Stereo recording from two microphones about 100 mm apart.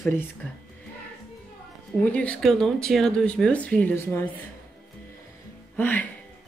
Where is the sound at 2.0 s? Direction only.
15° left (ahead or behind).